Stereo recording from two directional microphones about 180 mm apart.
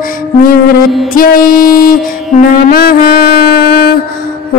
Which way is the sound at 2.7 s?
55° left (ahead or behind).